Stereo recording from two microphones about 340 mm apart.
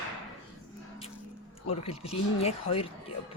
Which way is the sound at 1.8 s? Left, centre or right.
Centre.